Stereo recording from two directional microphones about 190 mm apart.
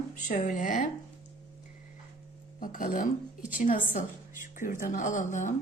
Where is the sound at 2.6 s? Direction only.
45° left (ahead or behind).